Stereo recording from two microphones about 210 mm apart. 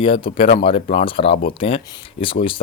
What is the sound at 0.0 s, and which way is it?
Speech, 25° left (ahead or behind).